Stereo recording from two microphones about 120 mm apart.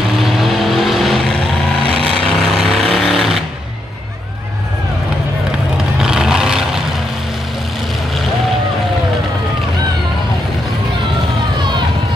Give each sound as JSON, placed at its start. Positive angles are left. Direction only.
{"t": 0.2, "sound": "vehicle", "side_deg": 0}
{"t": 1.8, "sound": "vehicle", "side_deg": -55}
{"t": 2.0, "sound": "a sound", "side_deg": 5}
{"t": 5.9, "sound": "vehicle", "side_deg": -5}